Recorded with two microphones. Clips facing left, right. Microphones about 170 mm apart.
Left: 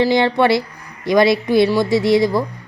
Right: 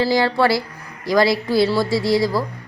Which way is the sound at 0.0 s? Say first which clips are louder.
Left 3 dB; 20° left (ahead or behind).